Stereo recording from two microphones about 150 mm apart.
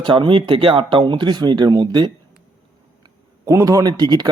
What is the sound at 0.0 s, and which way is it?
Speech, 35° right (ahead or behind).